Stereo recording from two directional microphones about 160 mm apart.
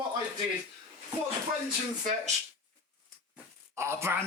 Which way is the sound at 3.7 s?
15° right (ahead or behind).